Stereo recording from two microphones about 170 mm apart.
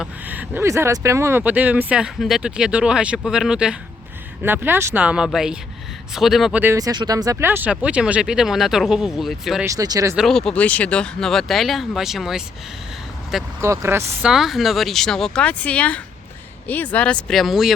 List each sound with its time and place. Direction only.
0.0 s speech: 10° right (ahead or behind)
9.6 s speech: 20° right (ahead or behind)
10.2 s speech: centre (ahead or behind)
13.6 s speech: 15° right (ahead or behind)
14.2 s speech: 5° right (ahead or behind)